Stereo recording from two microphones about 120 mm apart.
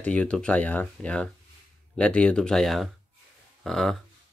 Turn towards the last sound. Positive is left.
turn(degrees=5)  # may be behind; listen again after turning